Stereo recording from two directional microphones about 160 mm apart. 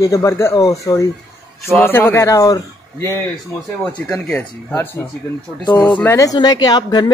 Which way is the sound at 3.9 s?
5° left (ahead or behind).